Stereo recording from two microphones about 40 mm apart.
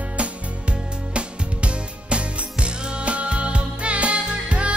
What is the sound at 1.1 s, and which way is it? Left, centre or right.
Music, right.